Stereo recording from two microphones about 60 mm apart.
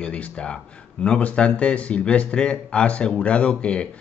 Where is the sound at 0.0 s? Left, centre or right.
Left.